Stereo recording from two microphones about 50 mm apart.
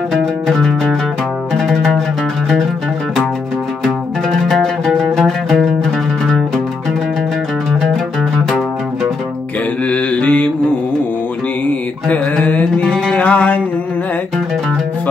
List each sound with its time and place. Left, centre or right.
0.1 s music: centre
3.8 s music: centre
9.8 s mantra: left
12.1 s mantra: left
12.8 s music: centre
13.2 s music: left